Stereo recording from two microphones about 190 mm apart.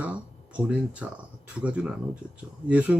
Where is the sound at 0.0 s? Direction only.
5° right (ahead or behind).